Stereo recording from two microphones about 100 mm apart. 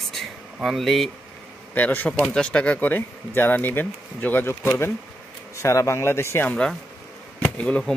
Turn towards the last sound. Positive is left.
turn(degrees=10)  # may be behind; listen again after turning